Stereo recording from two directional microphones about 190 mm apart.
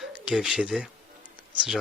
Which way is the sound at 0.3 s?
5° right (ahead or behind).